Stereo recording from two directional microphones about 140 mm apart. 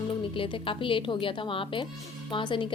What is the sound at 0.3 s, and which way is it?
A woman's voice, 40° left (ahead or behind).